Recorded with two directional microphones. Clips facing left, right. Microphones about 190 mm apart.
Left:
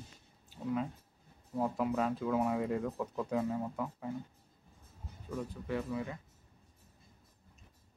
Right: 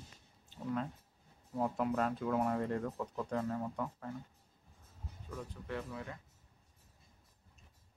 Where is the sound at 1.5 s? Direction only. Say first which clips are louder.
Left 1 dB; centre (ahead or behind).